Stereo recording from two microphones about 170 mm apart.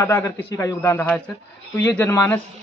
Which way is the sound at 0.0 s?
20° left (ahead or behind).